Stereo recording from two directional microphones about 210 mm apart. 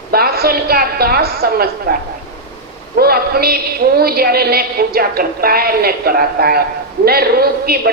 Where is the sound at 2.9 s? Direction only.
45° right (ahead or behind).